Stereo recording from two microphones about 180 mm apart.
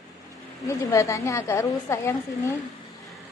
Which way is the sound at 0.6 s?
15° left (ahead or behind).